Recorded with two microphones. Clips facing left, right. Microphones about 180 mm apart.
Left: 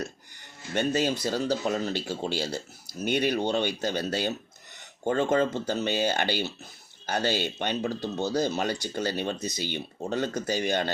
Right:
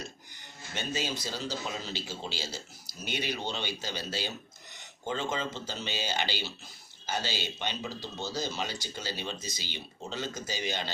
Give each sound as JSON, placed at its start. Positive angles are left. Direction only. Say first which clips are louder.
{"t": 0.7, "sound": "speech", "louder": "left 9 dB", "side_deg": 55}